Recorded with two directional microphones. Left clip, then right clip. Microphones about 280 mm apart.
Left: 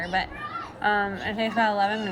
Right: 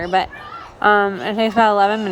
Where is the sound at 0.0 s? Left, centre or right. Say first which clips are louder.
Right 9 dB; centre.